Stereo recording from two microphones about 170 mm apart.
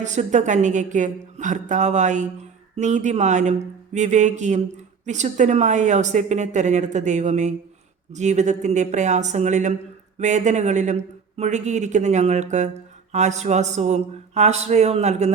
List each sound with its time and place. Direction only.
0.0 s a man's voice: 45° right (ahead or behind)